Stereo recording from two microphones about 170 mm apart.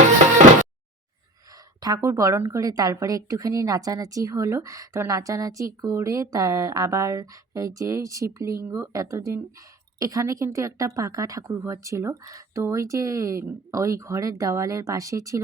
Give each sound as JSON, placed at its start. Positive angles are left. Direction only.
{"t": 1.8, "sound": "speech", "side_deg": -20}